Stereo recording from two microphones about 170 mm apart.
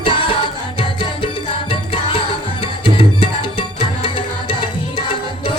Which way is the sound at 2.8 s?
30° left (ahead or behind).